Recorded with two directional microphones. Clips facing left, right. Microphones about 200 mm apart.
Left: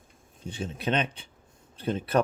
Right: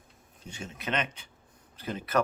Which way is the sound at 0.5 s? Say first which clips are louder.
Left 5 dB; 30° left (ahead or behind).